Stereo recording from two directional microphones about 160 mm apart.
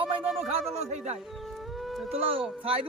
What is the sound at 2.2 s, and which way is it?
Speech, 35° right (ahead or behind).